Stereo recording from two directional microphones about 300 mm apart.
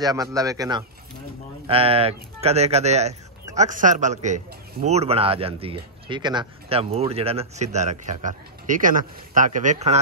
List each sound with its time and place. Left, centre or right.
0.0 s a man's voice: centre